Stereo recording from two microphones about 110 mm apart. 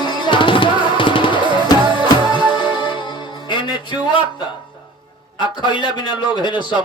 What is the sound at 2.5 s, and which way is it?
Music, 45° left (ahead or behind).